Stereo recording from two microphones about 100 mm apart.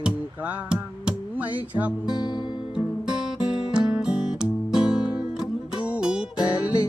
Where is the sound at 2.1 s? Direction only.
45° left (ahead or behind).